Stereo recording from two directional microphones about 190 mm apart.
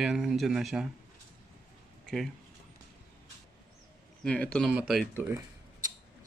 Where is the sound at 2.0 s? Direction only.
Centre (ahead or behind).